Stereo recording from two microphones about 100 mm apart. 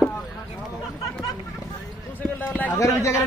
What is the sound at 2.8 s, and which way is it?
Speech, 30° left (ahead or behind).